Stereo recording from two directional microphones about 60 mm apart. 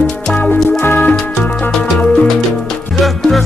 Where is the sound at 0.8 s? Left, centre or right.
Left.